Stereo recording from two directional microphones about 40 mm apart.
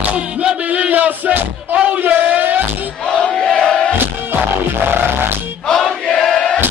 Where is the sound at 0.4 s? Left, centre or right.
Right.